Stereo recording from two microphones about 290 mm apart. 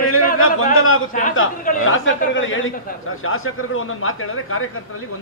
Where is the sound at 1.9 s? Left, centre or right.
Left.